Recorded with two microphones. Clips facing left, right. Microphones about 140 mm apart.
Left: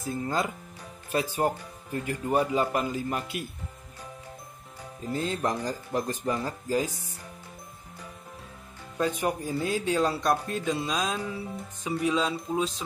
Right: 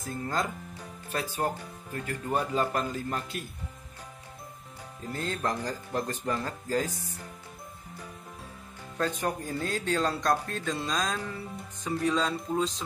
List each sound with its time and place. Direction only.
0.0 s speech: 10° left (ahead or behind)
5.1 s speech: 15° left (ahead or behind)
8.9 s speech: 10° left (ahead or behind)